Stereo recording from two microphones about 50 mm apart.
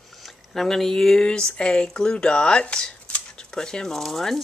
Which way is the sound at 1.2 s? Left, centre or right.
Centre.